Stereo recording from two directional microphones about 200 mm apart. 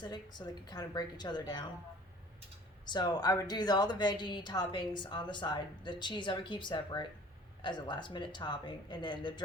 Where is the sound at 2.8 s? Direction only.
20° left (ahead or behind).